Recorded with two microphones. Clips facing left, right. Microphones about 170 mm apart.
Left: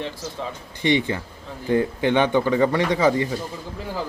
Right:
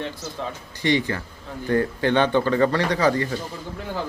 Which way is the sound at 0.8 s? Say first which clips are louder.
Left 1 dB; 20° left (ahead or behind).